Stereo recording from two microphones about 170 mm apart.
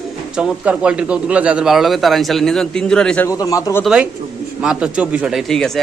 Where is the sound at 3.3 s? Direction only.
20° left (ahead or behind).